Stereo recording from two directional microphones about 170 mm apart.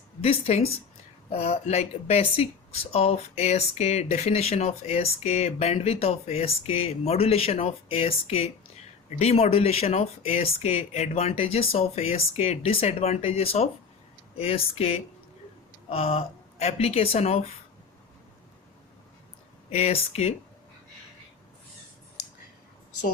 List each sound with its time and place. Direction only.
0.2 s speech: 35° left (ahead or behind)
19.7 s speech: 40° left (ahead or behind)